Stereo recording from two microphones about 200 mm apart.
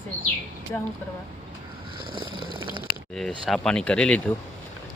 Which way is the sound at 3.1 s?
Centre (ahead or behind).